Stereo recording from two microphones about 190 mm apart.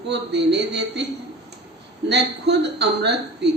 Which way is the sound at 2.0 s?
65° right (ahead or behind).